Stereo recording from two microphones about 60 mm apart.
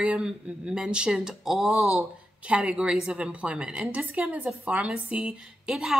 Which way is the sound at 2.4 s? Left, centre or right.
Centre.